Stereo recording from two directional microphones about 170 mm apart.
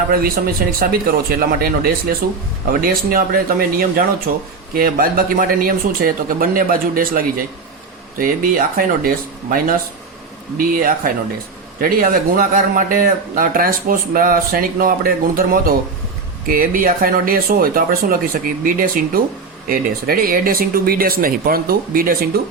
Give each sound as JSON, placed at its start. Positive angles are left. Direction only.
{"t": 0.1, "sound": "speech", "side_deg": -60}
{"t": 8.2, "sound": "speech", "side_deg": -55}